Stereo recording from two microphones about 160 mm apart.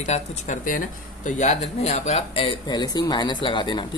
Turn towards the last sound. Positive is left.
turn(degrees=30)  # may be behind; listen again after turning